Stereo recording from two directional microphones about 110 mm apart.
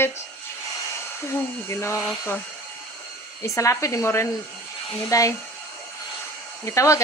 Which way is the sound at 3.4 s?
30° left (ahead or behind).